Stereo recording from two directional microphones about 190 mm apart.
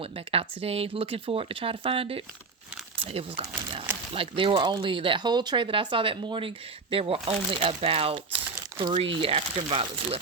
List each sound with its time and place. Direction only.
0.0 s speech: 30° right (ahead or behind)